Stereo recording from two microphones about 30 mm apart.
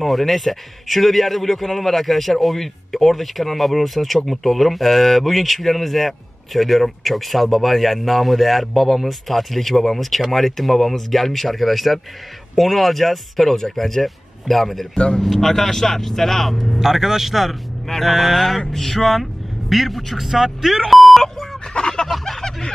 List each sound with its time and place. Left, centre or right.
0.0 s speech: centre
16.8 s a man's voice: centre
18.7 s speech: centre
20.2 s speech: centre
21.7 s fowl: left
22.2 s a sound: centre